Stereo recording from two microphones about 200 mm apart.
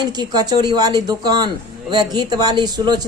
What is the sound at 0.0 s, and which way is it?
A woman's voice, 20° right (ahead or behind).